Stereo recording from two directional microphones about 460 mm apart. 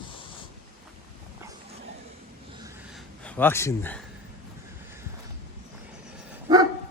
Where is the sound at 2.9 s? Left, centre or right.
Centre.